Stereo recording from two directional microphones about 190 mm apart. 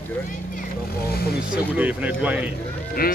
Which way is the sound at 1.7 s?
10° right (ahead or behind).